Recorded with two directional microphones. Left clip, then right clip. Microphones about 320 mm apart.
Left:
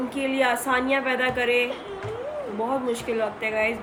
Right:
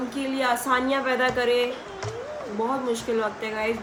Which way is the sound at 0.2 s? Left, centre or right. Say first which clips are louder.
Left 2 dB; centre.